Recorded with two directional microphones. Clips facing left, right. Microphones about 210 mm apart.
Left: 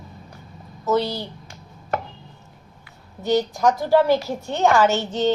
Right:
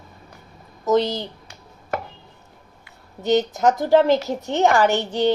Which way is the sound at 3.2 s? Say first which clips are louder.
Right 1 dB; 20° right (ahead or behind).